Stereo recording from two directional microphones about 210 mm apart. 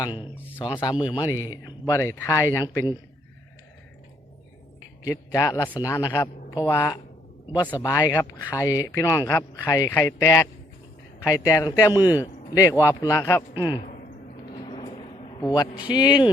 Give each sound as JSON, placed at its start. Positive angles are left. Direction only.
{"t": 0.0, "sound": "speech", "side_deg": 20}
{"t": 5.0, "sound": "speech", "side_deg": 15}
{"t": 14.5, "sound": "vehicle", "side_deg": 25}
{"t": 15.4, "sound": "speech", "side_deg": 15}